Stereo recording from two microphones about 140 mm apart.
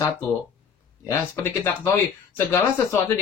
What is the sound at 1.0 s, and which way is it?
Speech, 20° left (ahead or behind).